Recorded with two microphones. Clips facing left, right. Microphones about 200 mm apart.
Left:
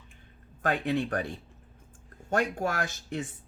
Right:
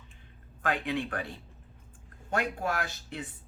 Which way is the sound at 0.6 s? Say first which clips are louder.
Left 3 dB; 40° left (ahead or behind).